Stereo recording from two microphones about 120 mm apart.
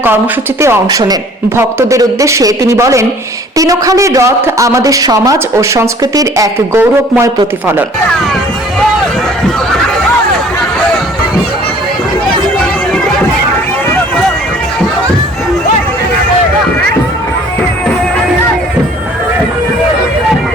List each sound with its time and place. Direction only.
0.9 s speech: 35° right (ahead or behind)